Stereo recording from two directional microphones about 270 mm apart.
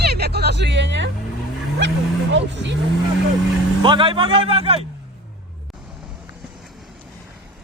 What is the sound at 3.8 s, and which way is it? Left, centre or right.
A man's voice, centre.